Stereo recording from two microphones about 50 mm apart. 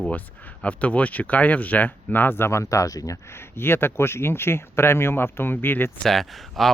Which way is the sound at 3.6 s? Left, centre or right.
Left.